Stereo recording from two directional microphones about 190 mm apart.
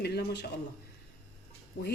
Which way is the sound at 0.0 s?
60° left (ahead or behind).